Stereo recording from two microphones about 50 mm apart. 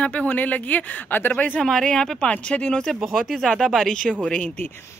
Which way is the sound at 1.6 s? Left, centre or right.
Centre.